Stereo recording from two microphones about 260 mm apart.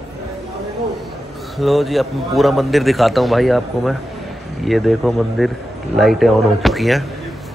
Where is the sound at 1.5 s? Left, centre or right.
Centre.